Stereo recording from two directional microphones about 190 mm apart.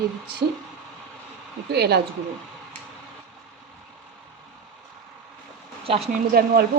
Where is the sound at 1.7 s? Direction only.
60° right (ahead or behind).